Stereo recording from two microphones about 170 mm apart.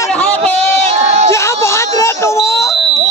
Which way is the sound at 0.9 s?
40° right (ahead or behind).